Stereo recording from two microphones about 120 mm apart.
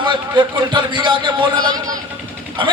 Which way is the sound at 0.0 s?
40° right (ahead or behind).